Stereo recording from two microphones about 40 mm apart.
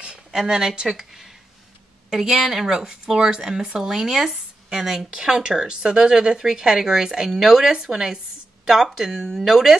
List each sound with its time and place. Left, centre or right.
0.0 s speech: centre
2.0 s speech: centre